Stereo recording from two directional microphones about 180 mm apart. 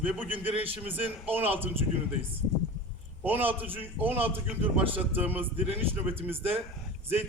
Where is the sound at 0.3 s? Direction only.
30° right (ahead or behind).